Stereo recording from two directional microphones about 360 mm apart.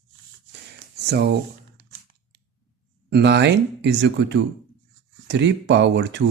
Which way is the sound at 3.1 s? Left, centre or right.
Right.